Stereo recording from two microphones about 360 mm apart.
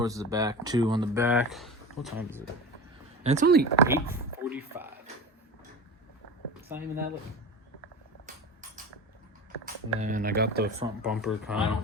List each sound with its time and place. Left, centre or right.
0.0 s speech: centre
3.2 s speech: right
3.8 s speech: centre
6.5 s a sound: centre
9.6 s speech: right
11.0 s speech: centre